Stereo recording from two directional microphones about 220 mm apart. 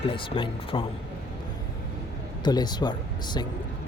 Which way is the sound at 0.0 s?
25° left (ahead or behind).